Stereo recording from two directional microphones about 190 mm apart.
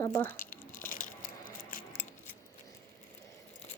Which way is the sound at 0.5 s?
45° left (ahead or behind).